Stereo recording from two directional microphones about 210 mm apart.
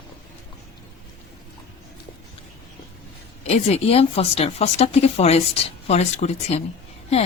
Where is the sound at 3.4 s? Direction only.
30° left (ahead or behind).